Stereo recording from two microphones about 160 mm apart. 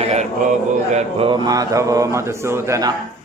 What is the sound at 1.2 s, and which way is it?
A man's voice, 30° right (ahead or behind).